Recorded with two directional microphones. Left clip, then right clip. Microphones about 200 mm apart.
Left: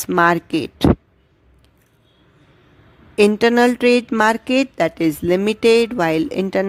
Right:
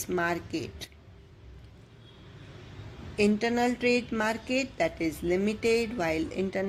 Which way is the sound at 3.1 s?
50° left (ahead or behind).